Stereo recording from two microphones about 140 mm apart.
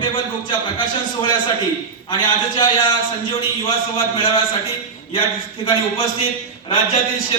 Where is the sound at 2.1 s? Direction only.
35° left (ahead or behind).